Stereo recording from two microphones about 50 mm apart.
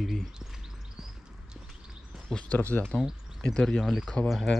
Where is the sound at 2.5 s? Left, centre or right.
Left.